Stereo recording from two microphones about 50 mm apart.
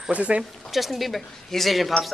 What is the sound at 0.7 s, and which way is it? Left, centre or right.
Speech, centre.